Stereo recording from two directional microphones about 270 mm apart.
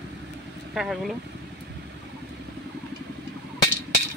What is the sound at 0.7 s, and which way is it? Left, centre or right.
Speech, centre.